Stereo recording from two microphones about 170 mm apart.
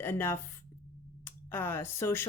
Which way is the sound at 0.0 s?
15° left (ahead or behind).